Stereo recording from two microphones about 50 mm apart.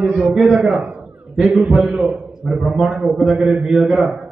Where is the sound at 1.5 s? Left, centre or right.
Right.